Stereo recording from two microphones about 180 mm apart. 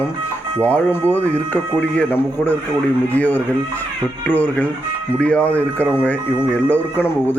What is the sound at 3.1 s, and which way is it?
Speech, 10° left (ahead or behind).